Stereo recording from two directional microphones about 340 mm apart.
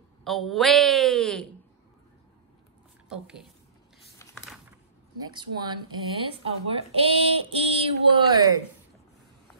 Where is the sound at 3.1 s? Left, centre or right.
Centre.